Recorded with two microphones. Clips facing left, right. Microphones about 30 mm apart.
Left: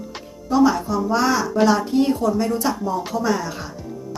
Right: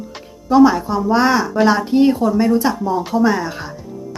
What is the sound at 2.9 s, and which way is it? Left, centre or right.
Speech, right.